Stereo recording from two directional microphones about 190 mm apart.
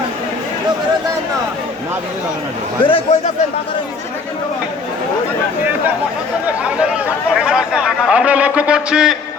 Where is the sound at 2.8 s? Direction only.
30° left (ahead or behind).